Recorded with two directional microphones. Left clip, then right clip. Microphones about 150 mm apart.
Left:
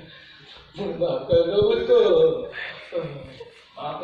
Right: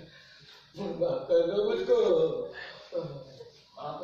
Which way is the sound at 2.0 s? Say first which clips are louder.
Left 10 dB; 45° right (ahead or behind).